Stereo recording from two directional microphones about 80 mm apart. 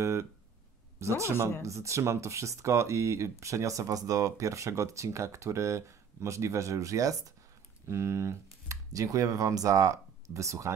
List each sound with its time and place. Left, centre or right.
0.0 s a sound: right
0.9 s speech: right
7.8 s speech: right